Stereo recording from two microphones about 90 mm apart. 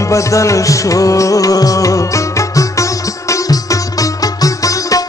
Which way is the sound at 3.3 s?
40° left (ahead or behind).